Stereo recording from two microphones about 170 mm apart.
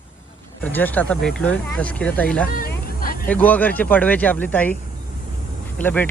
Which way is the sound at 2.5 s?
60° left (ahead or behind).